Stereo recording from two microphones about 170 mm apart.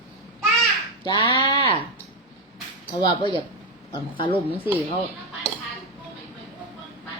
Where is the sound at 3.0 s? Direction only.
25° left (ahead or behind).